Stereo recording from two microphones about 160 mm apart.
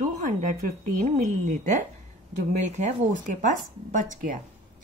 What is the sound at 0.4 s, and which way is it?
A woman's voice, 55° right (ahead or behind).